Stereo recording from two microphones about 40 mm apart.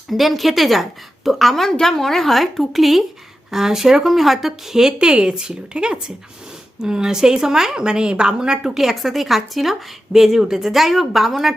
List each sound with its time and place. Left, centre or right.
0.1 s a woman's voice: centre